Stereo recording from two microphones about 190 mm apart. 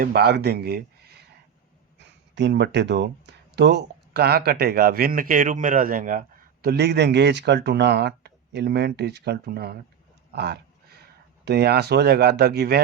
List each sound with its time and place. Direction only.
0.0 s speech: 55° right (ahead or behind)
10.3 s a sound: 60° right (ahead or behind)
11.4 s speech: 60° right (ahead or behind)